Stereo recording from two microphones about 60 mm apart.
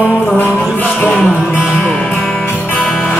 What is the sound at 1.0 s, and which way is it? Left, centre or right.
Music, left.